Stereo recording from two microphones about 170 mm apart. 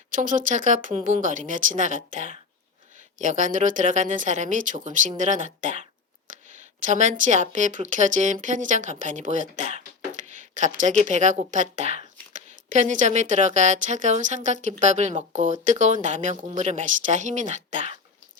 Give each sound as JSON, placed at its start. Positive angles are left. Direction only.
{"t": 0.1, "sound": "speech", "side_deg": -50}
{"t": 6.8, "sound": "speech", "side_deg": -45}